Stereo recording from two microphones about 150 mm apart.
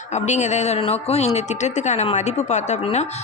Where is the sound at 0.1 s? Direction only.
50° left (ahead or behind).